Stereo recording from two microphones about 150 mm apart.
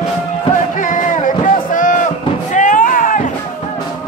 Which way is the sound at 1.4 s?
60° left (ahead or behind).